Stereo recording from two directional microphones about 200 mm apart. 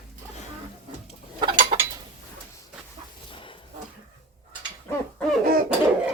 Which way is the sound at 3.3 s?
25° left (ahead or behind).